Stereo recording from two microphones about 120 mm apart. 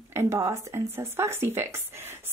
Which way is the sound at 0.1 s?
25° right (ahead or behind).